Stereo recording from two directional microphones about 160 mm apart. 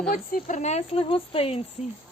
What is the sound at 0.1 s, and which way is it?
A woman's voice, 55° left (ahead or behind).